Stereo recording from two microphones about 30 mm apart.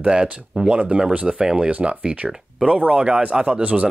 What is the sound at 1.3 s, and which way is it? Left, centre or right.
Speech, right.